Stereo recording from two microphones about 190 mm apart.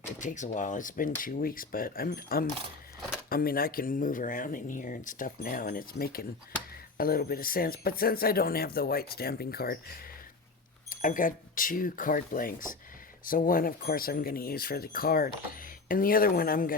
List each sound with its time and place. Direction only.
0.2 s speech: 40° left (ahead or behind)
10.8 s speech: 45° left (ahead or behind)